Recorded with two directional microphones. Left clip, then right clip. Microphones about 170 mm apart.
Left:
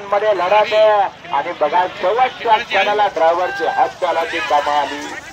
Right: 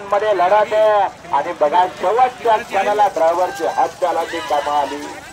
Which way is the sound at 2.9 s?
80° right.